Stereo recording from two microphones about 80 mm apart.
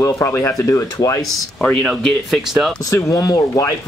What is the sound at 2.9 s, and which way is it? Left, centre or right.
Speech, left.